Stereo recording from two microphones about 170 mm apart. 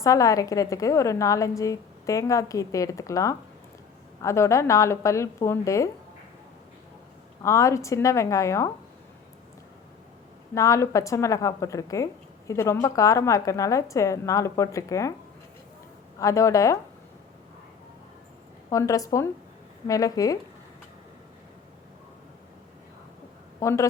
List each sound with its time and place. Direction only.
0.0 s a woman's voice: 20° left (ahead or behind)
7.4 s a woman's voice: 15° left (ahead or behind)
10.5 s a woman's voice: 20° left (ahead or behind)
16.1 s a woman's voice: 20° left (ahead or behind)
18.7 s a woman's voice: 20° left (ahead or behind)
23.6 s speech: 15° left (ahead or behind)